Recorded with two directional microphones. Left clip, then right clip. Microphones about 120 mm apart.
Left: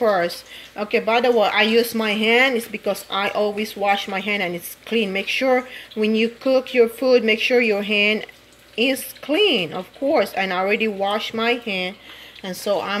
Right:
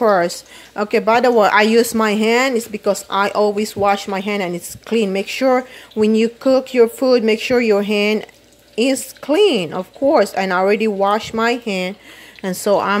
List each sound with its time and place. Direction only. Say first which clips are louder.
0.0 s speech: right 4 dB; 55° right (ahead or behind)
12.4 s speech: right 7 dB; 90° right